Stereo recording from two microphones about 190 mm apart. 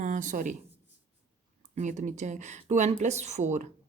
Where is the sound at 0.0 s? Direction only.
40° right (ahead or behind).